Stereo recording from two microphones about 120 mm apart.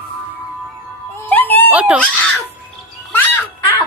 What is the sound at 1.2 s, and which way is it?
Music, 15° left (ahead or behind).